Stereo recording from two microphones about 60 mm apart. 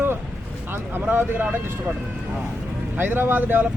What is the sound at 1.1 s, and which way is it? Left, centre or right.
Speech, right.